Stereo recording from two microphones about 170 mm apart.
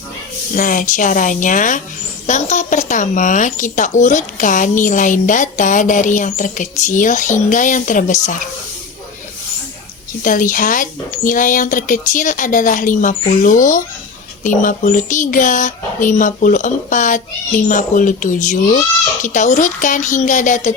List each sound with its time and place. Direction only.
0.5 s a woman's voice: 50° left (ahead or behind)
10.2 s a woman's voice: 50° left (ahead or behind)